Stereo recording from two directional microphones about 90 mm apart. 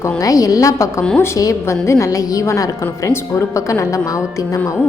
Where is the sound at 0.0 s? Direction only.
40° left (ahead or behind).